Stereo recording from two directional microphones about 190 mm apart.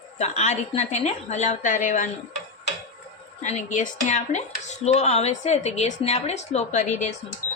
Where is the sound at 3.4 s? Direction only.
40° left (ahead or behind).